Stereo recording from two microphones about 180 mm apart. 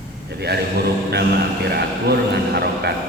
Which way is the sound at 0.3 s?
65° right (ahead or behind).